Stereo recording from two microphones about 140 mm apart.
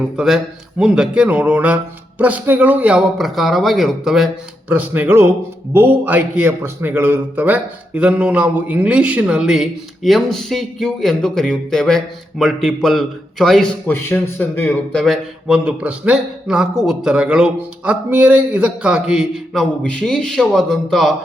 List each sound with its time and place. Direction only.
0.2 s a man's voice: 5° right (ahead or behind)
4.7 s a man's voice: 10° right (ahead or behind)
13.8 s speech: 15° left (ahead or behind)
14.9 s a man's voice: centre (ahead or behind)